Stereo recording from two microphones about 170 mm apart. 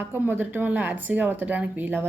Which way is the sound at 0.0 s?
10° right (ahead or behind).